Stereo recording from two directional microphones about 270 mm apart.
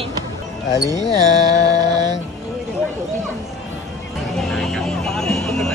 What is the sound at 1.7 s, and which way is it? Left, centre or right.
Mantra, centre.